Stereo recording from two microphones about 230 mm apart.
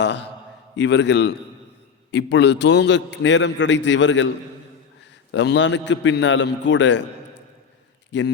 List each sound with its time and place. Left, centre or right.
0.0 s a man's voice: left
5.3 s a man's voice: left
8.1 s a man's voice: left